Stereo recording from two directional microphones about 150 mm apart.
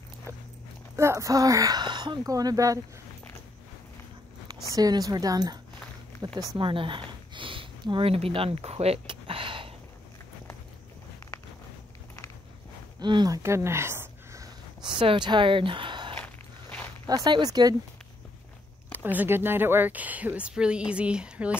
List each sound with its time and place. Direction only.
0.9 s speech: 20° right (ahead or behind)
4.6 s speech: 25° right (ahead or behind)
13.0 s speech: 30° right (ahead or behind)
13.4 s a sound: 20° right (ahead or behind)
15.0 s speech: 35° right (ahead or behind)
19.1 s speech: 15° right (ahead or behind)